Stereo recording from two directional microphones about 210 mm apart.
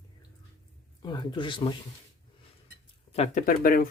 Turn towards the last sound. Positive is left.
turn(degrees=40)  # may be behind; listen again after turning